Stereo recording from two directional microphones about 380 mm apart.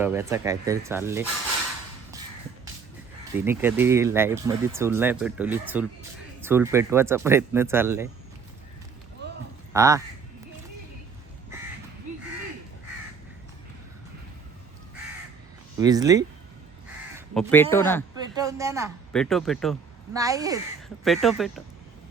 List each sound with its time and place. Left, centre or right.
0.0 s speech: centre
3.3 s speech: centre
9.2 s a sound: right
9.7 s speech: centre
15.8 s speech: centre
17.2 s speech: centre
18.3 s speech: centre